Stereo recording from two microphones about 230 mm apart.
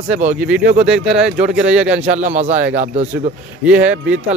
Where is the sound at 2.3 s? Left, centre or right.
Right.